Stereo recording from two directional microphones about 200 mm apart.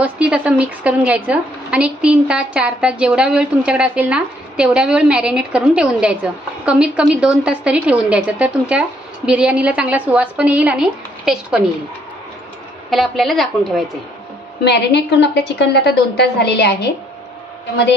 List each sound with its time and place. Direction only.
0.0 s a woman's voice: 5° right (ahead or behind)
12.9 s a woman's voice: centre (ahead or behind)
14.6 s a woman's voice: 55° left (ahead or behind)